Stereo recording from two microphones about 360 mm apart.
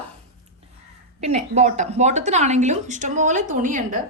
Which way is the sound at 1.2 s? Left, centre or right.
Centre.